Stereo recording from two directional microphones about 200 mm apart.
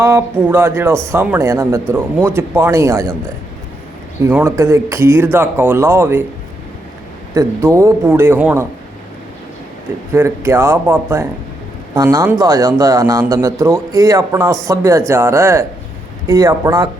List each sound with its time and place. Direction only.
0.0 s a man's voice: 10° right (ahead or behind)
4.2 s a man's voice: 10° right (ahead or behind)
7.3 s a man's voice: 15° right (ahead or behind)
10.1 s a man's voice: 15° right (ahead or behind)